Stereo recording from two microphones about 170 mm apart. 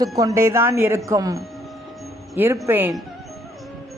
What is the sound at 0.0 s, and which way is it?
A woman's voice, 20° right (ahead or behind).